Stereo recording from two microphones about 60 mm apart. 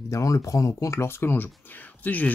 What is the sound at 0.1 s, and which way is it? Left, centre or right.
Speech, left.